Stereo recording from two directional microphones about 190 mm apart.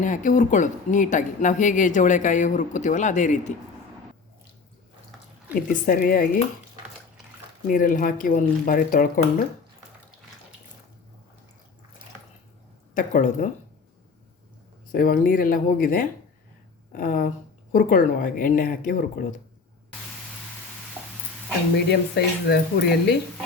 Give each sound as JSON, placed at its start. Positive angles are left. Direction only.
{"t": 0.0, "sound": "speech", "side_deg": 45}
{"t": 5.5, "sound": "speech", "side_deg": 50}
{"t": 7.7, "sound": "speech", "side_deg": 45}
{"t": 12.9, "sound": "speech", "side_deg": 45}
{"t": 14.9, "sound": "speech", "side_deg": 45}
{"t": 21.8, "sound": "speech", "side_deg": 60}